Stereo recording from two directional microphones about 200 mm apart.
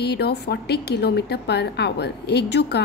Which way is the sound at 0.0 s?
55° left (ahead or behind).